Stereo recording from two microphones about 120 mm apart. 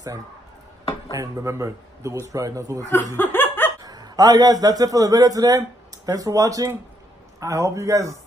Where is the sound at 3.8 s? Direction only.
35° right (ahead or behind).